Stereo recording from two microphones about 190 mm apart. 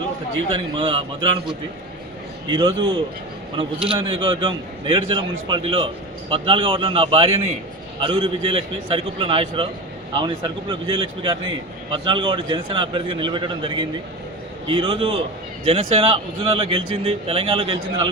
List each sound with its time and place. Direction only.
0.5 s a man's voice: 25° right (ahead or behind)
2.5 s a man's voice: 25° right (ahead or behind)